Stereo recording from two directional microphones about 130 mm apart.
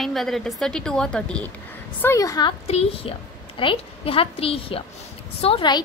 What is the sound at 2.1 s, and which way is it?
Speech, 30° left (ahead or behind).